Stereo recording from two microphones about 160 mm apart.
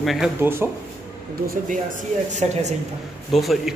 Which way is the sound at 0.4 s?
15° right (ahead or behind).